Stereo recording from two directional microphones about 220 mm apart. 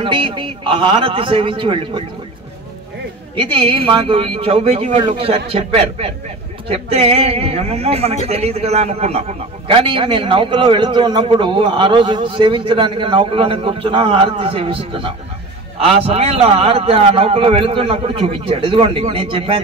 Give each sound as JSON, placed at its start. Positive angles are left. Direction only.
{"t": 0.0, "sound": "a man's voice", "side_deg": -25}
{"t": 3.3, "sound": "a man's voice", "side_deg": -25}